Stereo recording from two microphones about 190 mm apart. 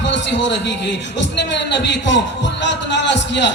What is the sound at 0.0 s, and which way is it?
A man's voice, 70° left (ahead or behind).